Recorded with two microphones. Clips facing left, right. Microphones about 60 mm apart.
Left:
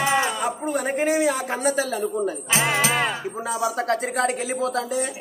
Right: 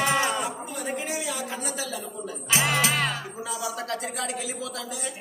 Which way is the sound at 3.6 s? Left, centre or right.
Left.